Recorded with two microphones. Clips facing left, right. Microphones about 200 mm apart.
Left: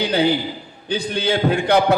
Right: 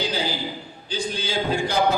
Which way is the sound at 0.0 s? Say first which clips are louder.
Left 8 dB; 60° left (ahead or behind).